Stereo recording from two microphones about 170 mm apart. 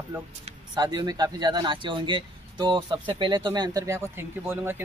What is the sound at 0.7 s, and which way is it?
Speech, 25° right (ahead or behind).